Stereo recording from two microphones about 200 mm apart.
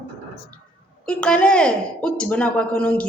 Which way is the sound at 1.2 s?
5° left (ahead or behind).